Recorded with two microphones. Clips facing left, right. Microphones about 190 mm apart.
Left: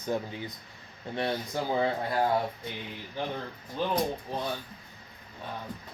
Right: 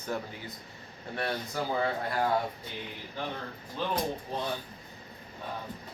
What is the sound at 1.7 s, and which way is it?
Speech, 20° left (ahead or behind).